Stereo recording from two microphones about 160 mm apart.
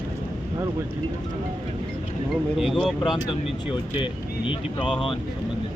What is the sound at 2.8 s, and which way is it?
Speech, centre (ahead or behind).